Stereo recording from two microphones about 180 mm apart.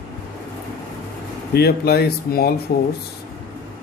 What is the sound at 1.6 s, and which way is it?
Speech, 60° left (ahead or behind).